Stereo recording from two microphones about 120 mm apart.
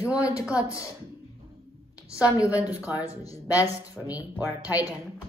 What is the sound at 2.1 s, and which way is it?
Speech, 30° left (ahead or behind).